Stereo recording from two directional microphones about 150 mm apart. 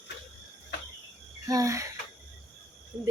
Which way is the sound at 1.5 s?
20° right (ahead or behind).